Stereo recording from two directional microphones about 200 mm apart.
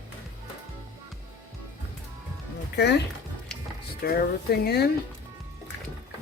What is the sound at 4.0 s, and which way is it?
Speech, 50° left (ahead or behind).